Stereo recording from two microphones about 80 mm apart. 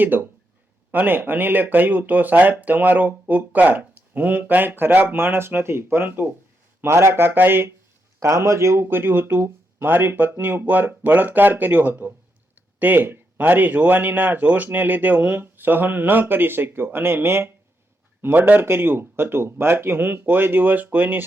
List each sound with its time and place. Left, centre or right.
0.0 s speech: right
8.2 s speech: right